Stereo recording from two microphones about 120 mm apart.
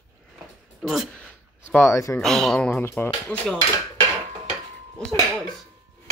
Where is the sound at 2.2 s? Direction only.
5° left (ahead or behind).